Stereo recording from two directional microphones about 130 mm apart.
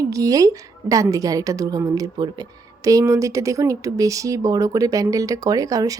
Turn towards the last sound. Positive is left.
turn(degrees=-25)  # may be behind; listen again after turning